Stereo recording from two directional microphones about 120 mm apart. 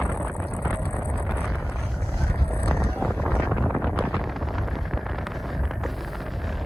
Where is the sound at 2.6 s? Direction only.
Centre (ahead or behind).